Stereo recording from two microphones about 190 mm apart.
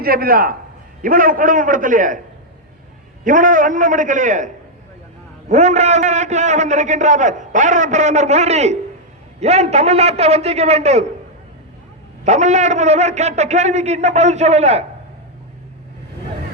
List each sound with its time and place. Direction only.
0.0 s a man's voice: 50° right (ahead or behind)
3.2 s a man's voice: 45° right (ahead or behind)
12.2 s a man's voice: 40° right (ahead or behind)